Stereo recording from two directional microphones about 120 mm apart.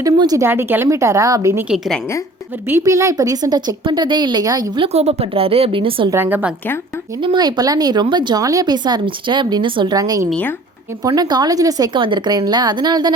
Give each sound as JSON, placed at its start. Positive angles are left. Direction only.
{"t": 0.0, "sound": "speech", "side_deg": -30}
{"t": 0.4, "sound": "a woman's voice", "side_deg": -20}
{"t": 1.7, "sound": "a woman's voice", "side_deg": -5}
{"t": 2.6, "sound": "a woman's voice", "side_deg": -20}
{"t": 4.8, "sound": "a woman's voice", "side_deg": -60}
{"t": 6.1, "sound": "a woman's voice", "side_deg": -20}
{"t": 7.2, "sound": "speech", "side_deg": -40}
{"t": 10.0, "sound": "a woman's voice", "side_deg": -25}
{"t": 11.9, "sound": "speech", "side_deg": -40}